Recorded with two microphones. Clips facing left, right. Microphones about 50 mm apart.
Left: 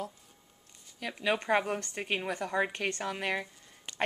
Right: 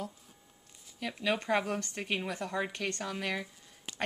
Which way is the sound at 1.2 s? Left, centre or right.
Centre.